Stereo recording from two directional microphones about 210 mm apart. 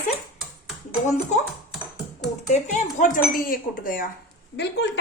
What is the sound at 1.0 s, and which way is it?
Speech, 35° left (ahead or behind).